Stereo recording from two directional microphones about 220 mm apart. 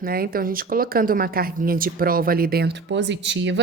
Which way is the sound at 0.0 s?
40° right (ahead or behind).